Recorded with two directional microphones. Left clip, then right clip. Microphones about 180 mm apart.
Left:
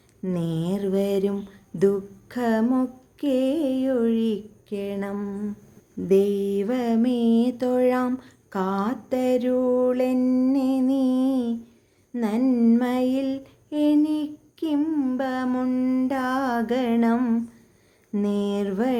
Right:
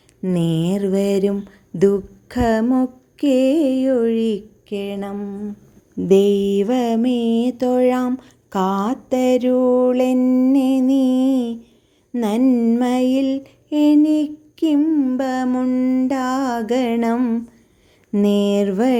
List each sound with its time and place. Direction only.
0.2 s mantra: 25° right (ahead or behind); by 5.4 s 10° right (ahead or behind)
6.1 s mantra: 30° right (ahead or behind)
18.1 s a sound: 35° right (ahead or behind)